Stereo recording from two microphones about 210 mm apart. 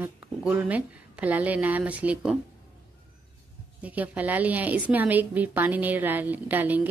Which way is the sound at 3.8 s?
5° right (ahead or behind).